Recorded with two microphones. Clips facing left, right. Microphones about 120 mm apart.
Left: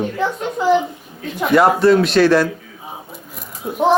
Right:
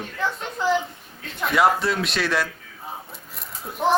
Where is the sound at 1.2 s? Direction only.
Centre (ahead or behind).